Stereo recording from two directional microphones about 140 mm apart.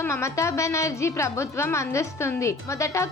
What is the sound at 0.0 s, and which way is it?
Speech, 20° left (ahead or behind).